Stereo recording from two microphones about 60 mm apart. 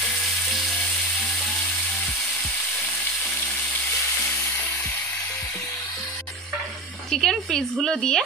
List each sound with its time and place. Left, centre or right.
7.1 s speech: centre